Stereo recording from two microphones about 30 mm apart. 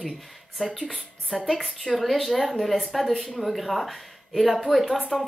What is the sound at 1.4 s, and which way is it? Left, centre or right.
Speech, centre.